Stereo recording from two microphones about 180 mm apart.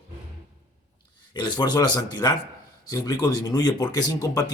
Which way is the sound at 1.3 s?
25° left (ahead or behind).